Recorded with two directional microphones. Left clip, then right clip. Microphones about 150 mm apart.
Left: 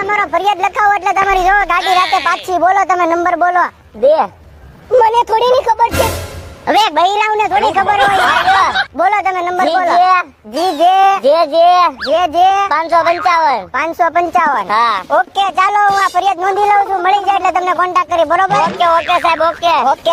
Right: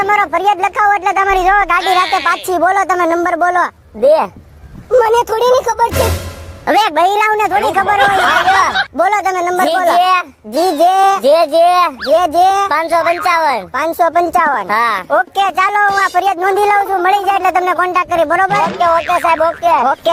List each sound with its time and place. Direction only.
0.0 s speech: 60° right (ahead or behind); by 1.8 s 40° right (ahead or behind)
2.2 s speech: 55° right (ahead or behind)
7.9 s a sound: centre (ahead or behind)
9.0 s speech: 60° right (ahead or behind)
18.9 s a sound: centre (ahead or behind)
19.2 s speech: 35° right (ahead or behind)
19.6 s speech: 20° right (ahead or behind)